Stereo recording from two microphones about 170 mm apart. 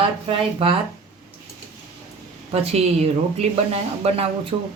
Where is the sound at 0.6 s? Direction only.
30° right (ahead or behind).